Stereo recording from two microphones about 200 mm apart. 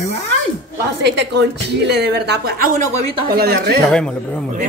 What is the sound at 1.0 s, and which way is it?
A woman's voice, 55° right (ahead or behind).